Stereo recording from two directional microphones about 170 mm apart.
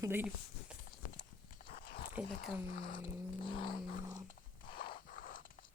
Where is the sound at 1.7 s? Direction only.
60° left (ahead or behind).